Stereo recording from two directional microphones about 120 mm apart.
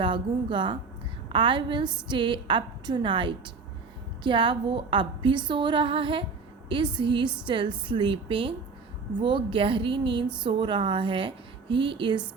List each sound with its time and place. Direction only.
0.0 s a woman's voice: 45° right (ahead or behind)